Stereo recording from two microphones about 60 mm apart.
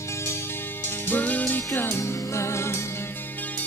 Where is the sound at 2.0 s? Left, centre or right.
Left.